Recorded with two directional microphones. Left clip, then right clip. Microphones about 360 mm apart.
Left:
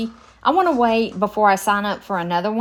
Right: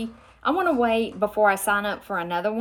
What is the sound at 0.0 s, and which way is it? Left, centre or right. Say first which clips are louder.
A woman's voice: left 7 dB; centre.